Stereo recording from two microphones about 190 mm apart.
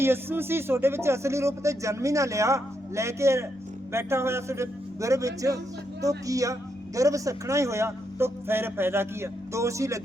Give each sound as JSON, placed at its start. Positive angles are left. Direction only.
{"t": 0.0, "sound": "a man's voice", "side_deg": -10}